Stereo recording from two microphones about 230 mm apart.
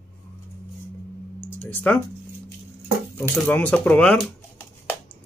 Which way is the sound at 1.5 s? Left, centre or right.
Centre.